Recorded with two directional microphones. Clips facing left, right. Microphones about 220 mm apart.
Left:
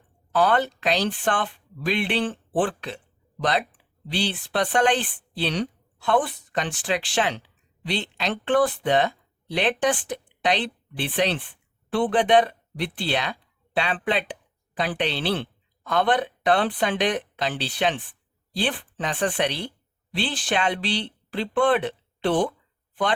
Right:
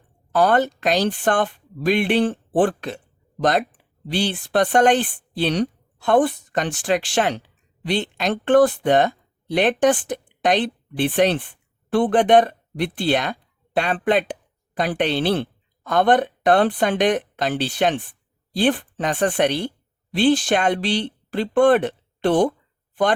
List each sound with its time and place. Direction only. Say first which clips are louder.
0.3 s speech: right 4 dB; 45° right (ahead or behind)